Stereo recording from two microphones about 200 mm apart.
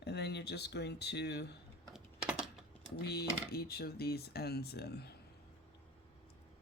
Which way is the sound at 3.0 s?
55° left (ahead or behind).